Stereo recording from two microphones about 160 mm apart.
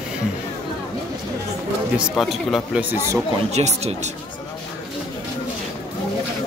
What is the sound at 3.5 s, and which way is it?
Speech, 45° right (ahead or behind).